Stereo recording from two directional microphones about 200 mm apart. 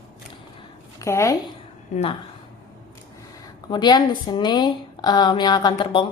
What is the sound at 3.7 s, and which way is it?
A woman's voice, 20° left (ahead or behind).